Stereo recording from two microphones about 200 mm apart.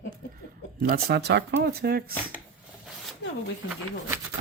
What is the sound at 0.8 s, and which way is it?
Speech, 50° right (ahead or behind).